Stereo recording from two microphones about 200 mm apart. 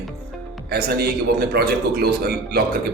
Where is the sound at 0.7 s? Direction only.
50° right (ahead or behind).